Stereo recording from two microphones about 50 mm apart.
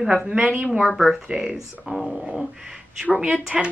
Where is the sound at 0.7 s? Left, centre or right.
Centre.